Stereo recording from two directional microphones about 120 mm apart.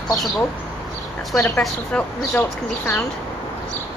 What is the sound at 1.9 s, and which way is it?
Speech, 15° left (ahead or behind).